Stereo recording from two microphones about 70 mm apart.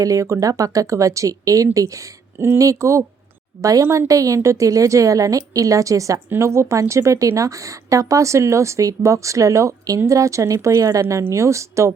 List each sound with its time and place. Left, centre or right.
0.0 s a woman's voice: right